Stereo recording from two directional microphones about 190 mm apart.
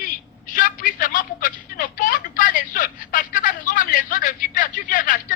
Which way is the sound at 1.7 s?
45° left (ahead or behind).